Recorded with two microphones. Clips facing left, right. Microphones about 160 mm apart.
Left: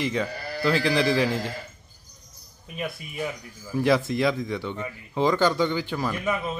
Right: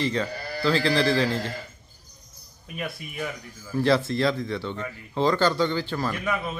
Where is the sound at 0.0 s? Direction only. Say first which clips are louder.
Even; 10° left (ahead or behind).